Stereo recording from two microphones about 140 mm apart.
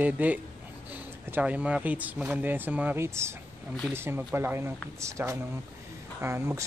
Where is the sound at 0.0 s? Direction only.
10° right (ahead or behind).